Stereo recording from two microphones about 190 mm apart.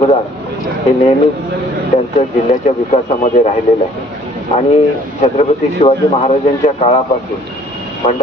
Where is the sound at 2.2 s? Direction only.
40° left (ahead or behind).